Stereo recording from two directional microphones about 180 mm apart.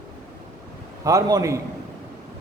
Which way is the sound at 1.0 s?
20° right (ahead or behind).